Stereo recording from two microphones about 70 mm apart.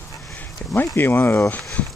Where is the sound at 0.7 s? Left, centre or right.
Left.